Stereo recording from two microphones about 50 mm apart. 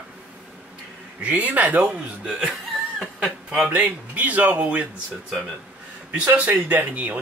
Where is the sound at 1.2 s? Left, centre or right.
Right.